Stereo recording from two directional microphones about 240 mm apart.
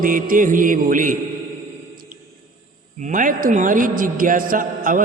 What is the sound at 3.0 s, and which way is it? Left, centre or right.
Mantra, right.